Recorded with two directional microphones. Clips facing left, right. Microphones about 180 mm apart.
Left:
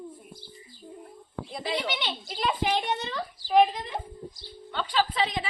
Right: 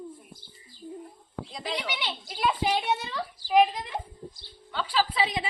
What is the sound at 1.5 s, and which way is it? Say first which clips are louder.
Speech: left 3 dB; 5° left (ahead or behind).